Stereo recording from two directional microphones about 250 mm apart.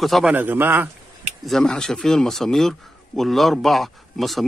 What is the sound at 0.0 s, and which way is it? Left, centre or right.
A man's voice, centre.